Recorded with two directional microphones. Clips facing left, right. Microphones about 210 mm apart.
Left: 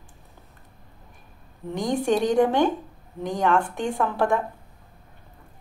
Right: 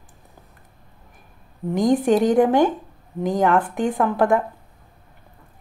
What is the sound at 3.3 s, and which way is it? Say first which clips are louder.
Speech: right 4 dB; 20° right (ahead or behind).